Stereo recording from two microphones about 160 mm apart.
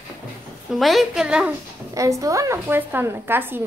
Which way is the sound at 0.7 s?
Centre (ahead or behind).